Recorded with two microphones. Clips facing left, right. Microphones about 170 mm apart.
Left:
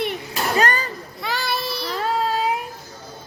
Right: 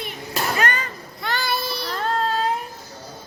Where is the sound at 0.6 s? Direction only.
40° left (ahead or behind).